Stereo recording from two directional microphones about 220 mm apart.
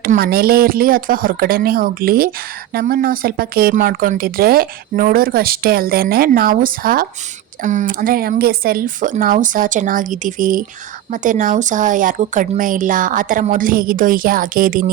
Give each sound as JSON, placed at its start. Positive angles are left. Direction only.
{"t": 0.0, "sound": "speech", "side_deg": -40}